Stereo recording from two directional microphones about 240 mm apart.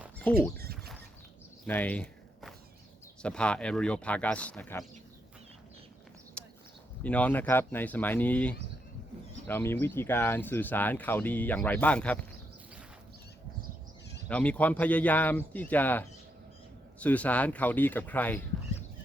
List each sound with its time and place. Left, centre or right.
0.2 s speech: centre
0.5 s a sound: right
1.6 s a sound: centre
3.2 s speech: centre
6.4 s clip-clop: centre
7.0 s speech: centre
14.3 s speech: centre